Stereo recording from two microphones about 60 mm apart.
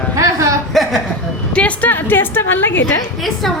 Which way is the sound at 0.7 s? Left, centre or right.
Centre.